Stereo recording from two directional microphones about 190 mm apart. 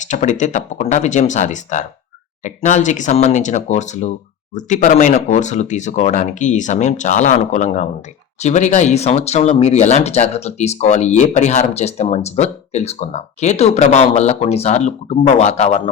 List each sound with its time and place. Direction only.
0.0 s speech: 40° left (ahead or behind)